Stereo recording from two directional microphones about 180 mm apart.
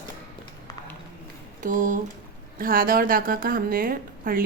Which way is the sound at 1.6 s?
45° right (ahead or behind).